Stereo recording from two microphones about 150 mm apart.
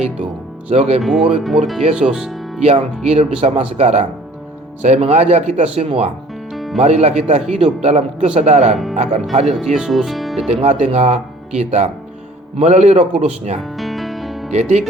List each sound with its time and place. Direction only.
0.7 s speech: 45° right (ahead or behind)
1.0 s speech: centre (ahead or behind)
1.8 s speech: 45° right (ahead or behind)
2.0 s speech: 5° right (ahead or behind)
2.6 s speech: 45° right (ahead or behind)
6.5 s music: centre (ahead or behind)
6.7 s speech: 45° right (ahead or behind)
9.6 s speech: 5° right (ahead or behind)
10.6 s speech: 50° right (ahead or behind)
13.6 s music: centre (ahead or behind)
14.5 s speech: 50° right (ahead or behind)